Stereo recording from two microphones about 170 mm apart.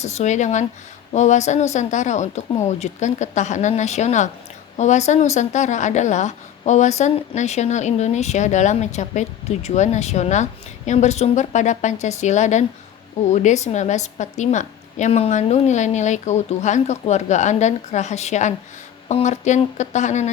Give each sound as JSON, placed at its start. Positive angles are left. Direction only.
{"t": 0.0, "sound": "a woman's voice", "side_deg": 40}